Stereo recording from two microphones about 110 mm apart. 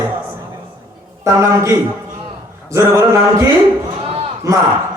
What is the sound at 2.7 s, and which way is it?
Speech, 25° right (ahead or behind).